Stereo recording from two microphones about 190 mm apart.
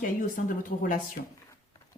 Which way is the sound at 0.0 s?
45° left (ahead or behind).